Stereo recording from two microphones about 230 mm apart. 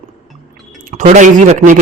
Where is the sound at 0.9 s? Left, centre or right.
Right.